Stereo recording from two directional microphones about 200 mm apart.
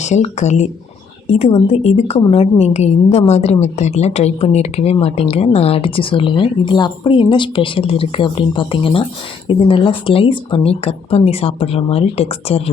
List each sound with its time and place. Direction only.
0.0 s a woman's voice: 35° left (ahead or behind)